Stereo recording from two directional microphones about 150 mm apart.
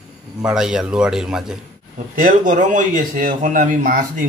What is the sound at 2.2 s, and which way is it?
A man's voice, 65° right (ahead or behind).